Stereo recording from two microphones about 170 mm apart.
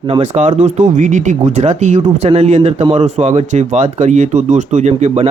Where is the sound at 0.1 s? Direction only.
45° right (ahead or behind).